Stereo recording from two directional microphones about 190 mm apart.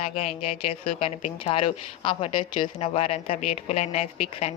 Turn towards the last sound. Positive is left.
turn(degrees=35)  # may be behind; listen again after turning